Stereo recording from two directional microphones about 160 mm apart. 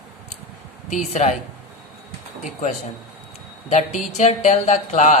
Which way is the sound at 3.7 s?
45° left (ahead or behind).